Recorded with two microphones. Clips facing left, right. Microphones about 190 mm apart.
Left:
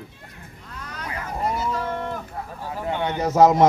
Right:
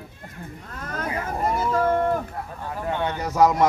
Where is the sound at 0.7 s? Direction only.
50° right (ahead or behind).